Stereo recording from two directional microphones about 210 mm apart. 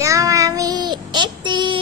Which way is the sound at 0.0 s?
15° right (ahead or behind).